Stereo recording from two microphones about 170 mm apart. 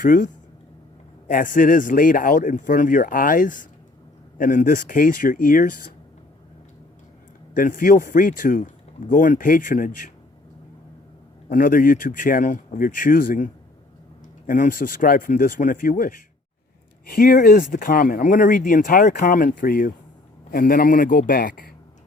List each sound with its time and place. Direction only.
0.0 s a man's voice: 50° left (ahead or behind)
1.3 s a man's voice: 50° left (ahead or behind)
7.5 s a man's voice: 55° left (ahead or behind)
11.5 s a man's voice: 55° left (ahead or behind)